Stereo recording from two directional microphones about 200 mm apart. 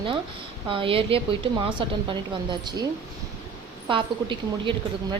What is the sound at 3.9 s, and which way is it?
Speech, 25° right (ahead or behind).